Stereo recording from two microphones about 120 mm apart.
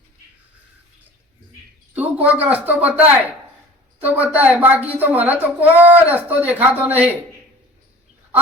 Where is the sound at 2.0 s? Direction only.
10° right (ahead or behind).